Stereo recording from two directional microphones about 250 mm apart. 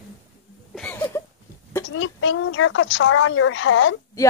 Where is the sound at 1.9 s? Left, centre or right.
Left.